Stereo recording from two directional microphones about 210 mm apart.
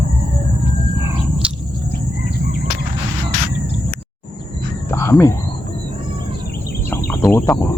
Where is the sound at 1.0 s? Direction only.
10° right (ahead or behind).